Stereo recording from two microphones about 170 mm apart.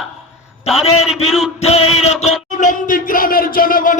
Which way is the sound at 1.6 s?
40° left (ahead or behind).